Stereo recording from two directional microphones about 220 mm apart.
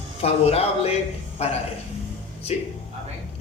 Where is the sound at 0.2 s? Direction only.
30° left (ahead or behind).